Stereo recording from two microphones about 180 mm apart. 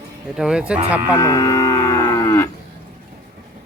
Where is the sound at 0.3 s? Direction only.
5° right (ahead or behind).